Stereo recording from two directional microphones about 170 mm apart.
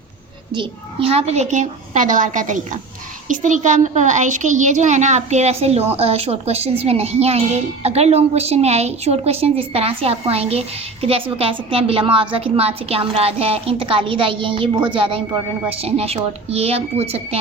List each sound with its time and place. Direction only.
0.5 s a woman's voice: 30° right (ahead or behind)